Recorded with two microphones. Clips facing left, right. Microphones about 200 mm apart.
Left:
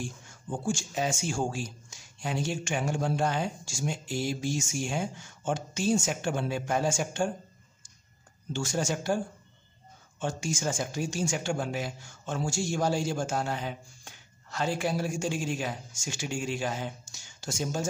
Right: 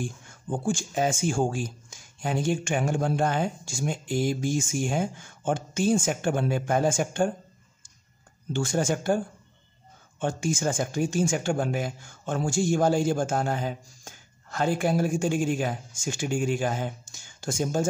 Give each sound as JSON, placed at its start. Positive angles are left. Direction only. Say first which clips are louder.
{"t": 0.0, "sound": "speech", "louder": "right 4 dB", "side_deg": -55}
{"t": 8.5, "sound": "speech", "louder": "right 4 dB", "side_deg": -55}
{"t": 10.2, "sound": "speech", "louder": "right 5 dB", "side_deg": -55}